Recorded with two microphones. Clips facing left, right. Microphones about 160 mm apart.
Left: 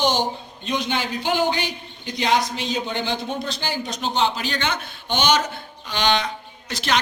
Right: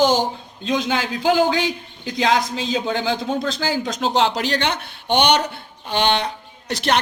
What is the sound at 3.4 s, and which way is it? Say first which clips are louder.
A man's voice: right 5 dB; 90° right.